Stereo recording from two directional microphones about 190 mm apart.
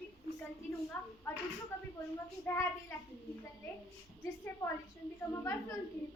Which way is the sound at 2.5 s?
10° left (ahead or behind).